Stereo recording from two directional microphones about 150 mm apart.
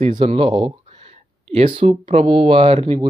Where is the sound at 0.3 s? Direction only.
35° right (ahead or behind).